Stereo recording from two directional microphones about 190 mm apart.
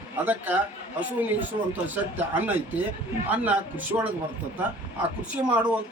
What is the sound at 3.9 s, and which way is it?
Speech, 20° right (ahead or behind).